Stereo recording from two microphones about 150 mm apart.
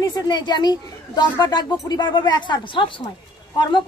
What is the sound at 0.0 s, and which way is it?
A woman's voice, 30° left (ahead or behind).